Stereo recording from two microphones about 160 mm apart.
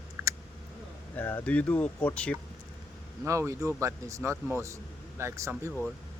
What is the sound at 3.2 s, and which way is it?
Speech, 20° right (ahead or behind).